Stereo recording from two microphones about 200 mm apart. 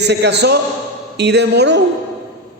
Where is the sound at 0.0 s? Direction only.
60° right (ahead or behind).